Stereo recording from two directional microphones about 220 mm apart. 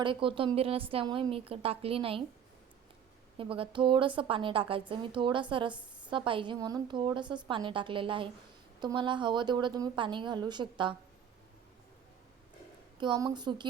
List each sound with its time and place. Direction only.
0.0 s a woman's voice: 25° right (ahead or behind)
3.3 s a woman's voice: 25° right (ahead or behind)
13.0 s a woman's voice: 20° right (ahead or behind)